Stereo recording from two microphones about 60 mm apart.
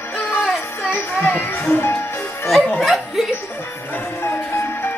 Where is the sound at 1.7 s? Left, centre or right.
Left.